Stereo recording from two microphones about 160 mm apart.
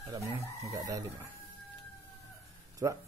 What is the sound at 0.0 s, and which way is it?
Speech, 20° right (ahead or behind).